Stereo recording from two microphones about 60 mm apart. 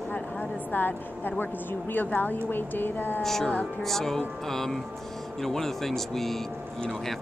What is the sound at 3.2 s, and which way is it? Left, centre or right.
Speech, centre.